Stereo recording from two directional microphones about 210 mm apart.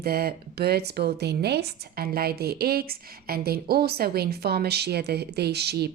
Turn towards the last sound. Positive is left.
turn(degrees=-50)  # may be behind; listen again after turning